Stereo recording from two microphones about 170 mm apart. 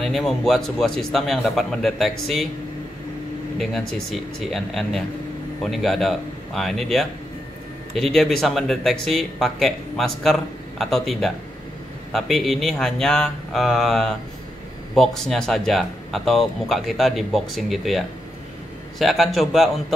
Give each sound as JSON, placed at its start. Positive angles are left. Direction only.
{"t": 0.0, "sound": "speech", "side_deg": 0}
{"t": 3.5, "sound": "speech", "side_deg": 0}